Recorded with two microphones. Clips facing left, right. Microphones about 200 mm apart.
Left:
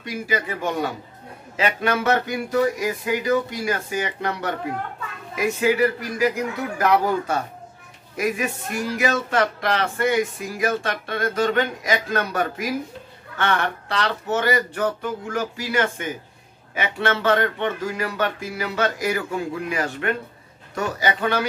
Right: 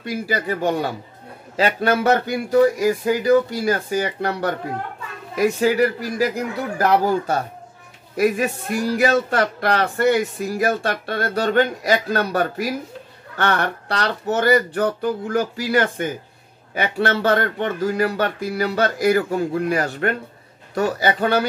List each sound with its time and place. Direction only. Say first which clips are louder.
0.0 s speech: right 2 dB; 35° right (ahead or behind)